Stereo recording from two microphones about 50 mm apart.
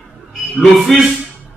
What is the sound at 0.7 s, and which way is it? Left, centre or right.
Speech, centre.